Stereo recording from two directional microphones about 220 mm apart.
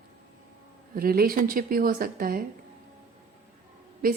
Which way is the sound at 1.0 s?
40° right (ahead or behind).